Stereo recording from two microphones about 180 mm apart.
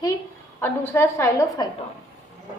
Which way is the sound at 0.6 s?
15° left (ahead or behind).